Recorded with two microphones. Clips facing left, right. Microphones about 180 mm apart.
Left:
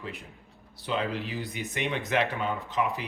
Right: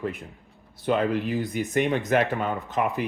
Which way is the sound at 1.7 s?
45° right (ahead or behind).